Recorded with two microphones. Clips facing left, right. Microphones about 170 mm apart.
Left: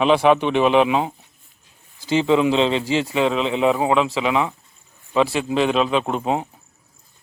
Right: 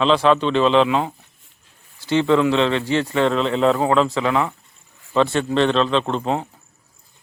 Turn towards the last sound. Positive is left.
turn(degrees=15)  # may be behind; listen again after turning